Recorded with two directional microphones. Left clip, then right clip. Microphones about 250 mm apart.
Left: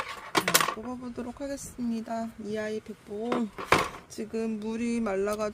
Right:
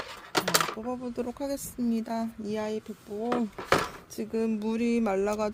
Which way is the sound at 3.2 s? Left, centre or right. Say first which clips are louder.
Right 1 dB; centre.